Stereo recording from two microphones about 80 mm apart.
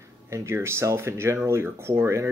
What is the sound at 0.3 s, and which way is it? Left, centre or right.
Speech, right.